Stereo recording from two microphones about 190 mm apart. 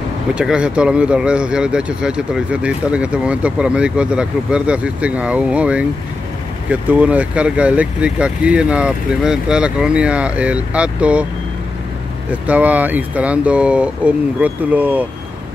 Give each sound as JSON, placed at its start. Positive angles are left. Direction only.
{"t": 0.3, "sound": "speech", "side_deg": -5}
{"t": 12.3, "sound": "speech", "side_deg": -5}